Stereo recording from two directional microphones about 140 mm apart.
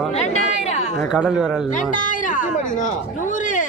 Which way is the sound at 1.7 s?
65° left (ahead or behind).